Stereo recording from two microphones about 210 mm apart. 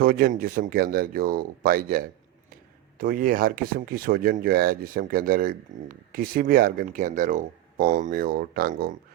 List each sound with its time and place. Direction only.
0.0 s speech: 45° right (ahead or behind)
3.0 s speech: 40° right (ahead or behind)